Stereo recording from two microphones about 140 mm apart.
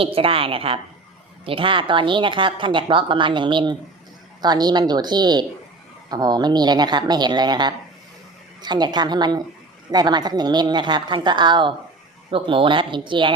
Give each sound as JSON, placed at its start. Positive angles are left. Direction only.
{"t": 0.0, "sound": "a woman's voice", "side_deg": -40}